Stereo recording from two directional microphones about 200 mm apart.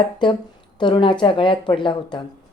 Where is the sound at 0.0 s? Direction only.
25° left (ahead or behind).